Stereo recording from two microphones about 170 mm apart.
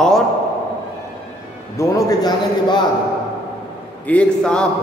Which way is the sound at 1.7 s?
20° left (ahead or behind).